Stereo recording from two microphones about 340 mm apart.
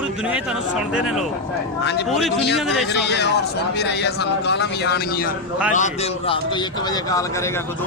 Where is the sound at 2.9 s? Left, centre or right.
Left; by 7.2 s centre.